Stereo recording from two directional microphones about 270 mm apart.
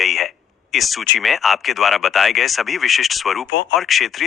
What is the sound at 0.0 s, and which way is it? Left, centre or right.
Speech, centre.